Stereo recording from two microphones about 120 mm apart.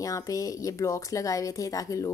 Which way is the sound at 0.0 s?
30° left (ahead or behind).